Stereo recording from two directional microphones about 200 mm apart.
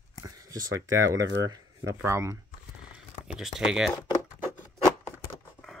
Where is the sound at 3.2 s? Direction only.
5° right (ahead or behind).